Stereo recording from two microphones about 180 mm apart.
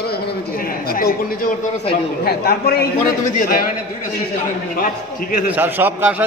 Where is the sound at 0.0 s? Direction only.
60° left (ahead or behind).